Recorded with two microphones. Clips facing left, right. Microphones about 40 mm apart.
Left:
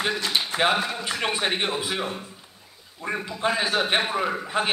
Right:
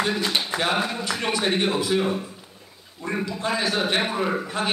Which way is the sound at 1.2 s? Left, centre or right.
Centre.